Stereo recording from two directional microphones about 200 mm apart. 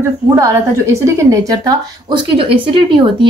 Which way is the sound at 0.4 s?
15° right (ahead or behind).